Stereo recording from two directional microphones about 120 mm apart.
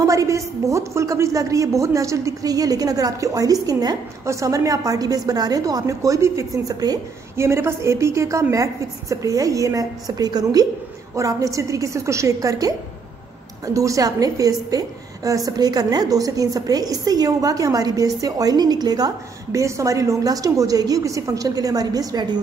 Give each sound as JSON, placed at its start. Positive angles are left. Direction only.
{"t": 0.0, "sound": "a woman's voice", "side_deg": -25}
{"t": 7.3, "sound": "a woman's voice", "side_deg": -20}
{"t": 13.7, "sound": "a woman's voice", "side_deg": -30}